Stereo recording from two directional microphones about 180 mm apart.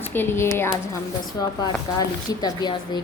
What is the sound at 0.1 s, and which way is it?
A woman's voice, 10° left (ahead or behind).